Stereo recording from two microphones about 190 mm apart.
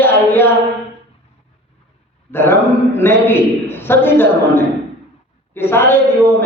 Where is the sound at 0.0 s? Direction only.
10° left (ahead or behind).